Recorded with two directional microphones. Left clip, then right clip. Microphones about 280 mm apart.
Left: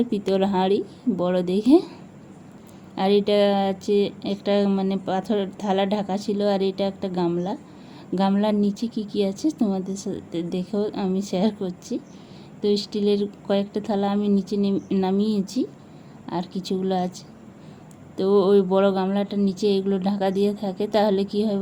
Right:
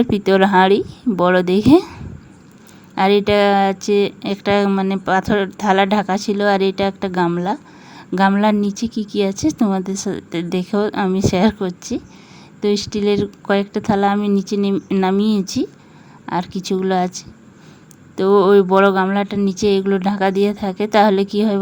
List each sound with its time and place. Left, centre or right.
0.0 s speech: right